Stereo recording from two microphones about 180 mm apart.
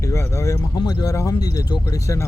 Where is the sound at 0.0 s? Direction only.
15° left (ahead or behind).